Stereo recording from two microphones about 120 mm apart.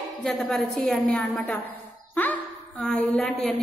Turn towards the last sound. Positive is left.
turn(degrees=5)  # may be behind; listen again after turning